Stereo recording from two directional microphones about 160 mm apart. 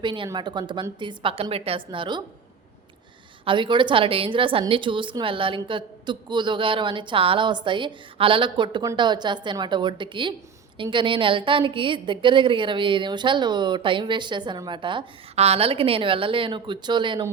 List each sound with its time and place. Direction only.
0.0 s a woman's voice: 30° right (ahead or behind)
3.4 s a woman's voice: 30° right (ahead or behind)